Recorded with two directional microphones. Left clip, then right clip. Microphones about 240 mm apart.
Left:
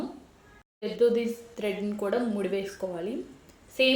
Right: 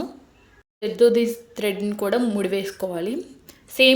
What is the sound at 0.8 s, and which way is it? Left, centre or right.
A woman's voice, right.